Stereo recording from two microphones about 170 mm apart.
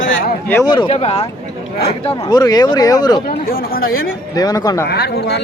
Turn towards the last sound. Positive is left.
turn(degrees=75)  # may be behind; listen again after turning